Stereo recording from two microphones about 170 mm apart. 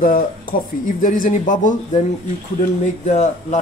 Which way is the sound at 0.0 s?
55° left (ahead or behind).